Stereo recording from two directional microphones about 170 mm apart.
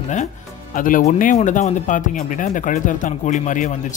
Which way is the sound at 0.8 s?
55° left (ahead or behind).